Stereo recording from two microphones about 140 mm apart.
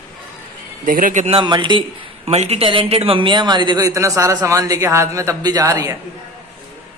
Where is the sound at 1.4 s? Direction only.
35° right (ahead or behind).